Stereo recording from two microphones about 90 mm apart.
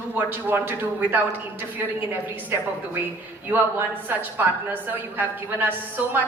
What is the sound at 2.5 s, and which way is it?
A woman's voice, 30° right (ahead or behind).